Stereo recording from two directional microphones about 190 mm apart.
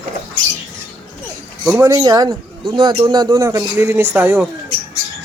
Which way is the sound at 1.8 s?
20° right (ahead or behind).